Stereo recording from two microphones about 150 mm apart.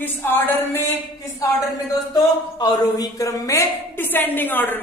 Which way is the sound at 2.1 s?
25° left (ahead or behind).